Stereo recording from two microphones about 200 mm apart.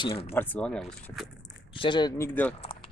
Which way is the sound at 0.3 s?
10° left (ahead or behind).